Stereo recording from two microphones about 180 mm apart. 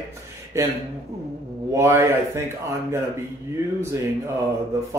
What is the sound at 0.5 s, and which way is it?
Speech, 15° right (ahead or behind).